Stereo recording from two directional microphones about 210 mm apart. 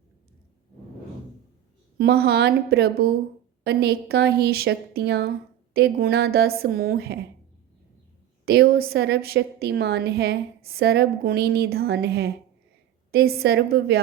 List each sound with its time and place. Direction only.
2.0 s a woman's voice: 50° right (ahead or behind)
8.4 s a woman's voice: 50° right (ahead or behind)